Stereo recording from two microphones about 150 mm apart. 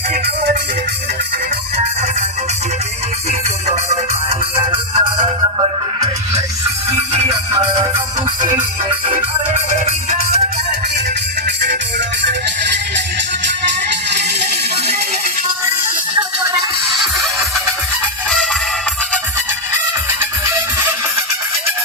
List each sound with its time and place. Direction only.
4.7 s music: 35° right (ahead or behind)
14.1 s music: 90° right